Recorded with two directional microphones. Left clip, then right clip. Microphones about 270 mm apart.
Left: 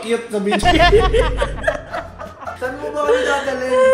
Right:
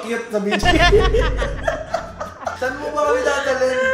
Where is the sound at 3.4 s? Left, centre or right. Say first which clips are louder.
Left 2 dB; left.